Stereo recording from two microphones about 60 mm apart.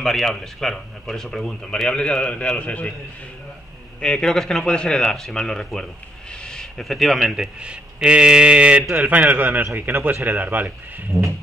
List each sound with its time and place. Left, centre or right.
0.0 s a man's voice: centre; by 2.9 s left
4.0 s speech: centre
7.6 s a man's voice: centre
11.1 s music: right